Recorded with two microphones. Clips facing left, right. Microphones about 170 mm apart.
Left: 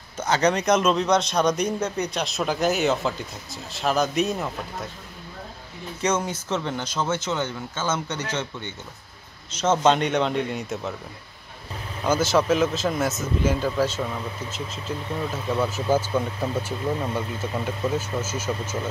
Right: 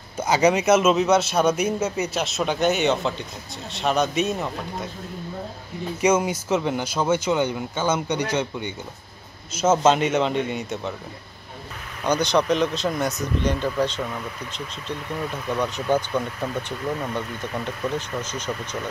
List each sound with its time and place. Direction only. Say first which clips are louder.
0.2 s speech: right 3 dB; 10° right (ahead or behind)
5.9 s speech: right 5 dB; 10° right (ahead or behind)
12.0 s speech: even; 5° left (ahead or behind)
15.3 s speech: left 1 dB; 5° left (ahead or behind)
16.7 s speech: left 1 dB; 20° left (ahead or behind)
17.6 s speech: left 1 dB; 10° left (ahead or behind)